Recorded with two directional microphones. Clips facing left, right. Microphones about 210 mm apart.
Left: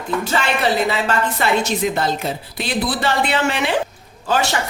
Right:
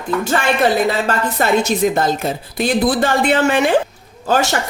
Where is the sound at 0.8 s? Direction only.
45° right (ahead or behind).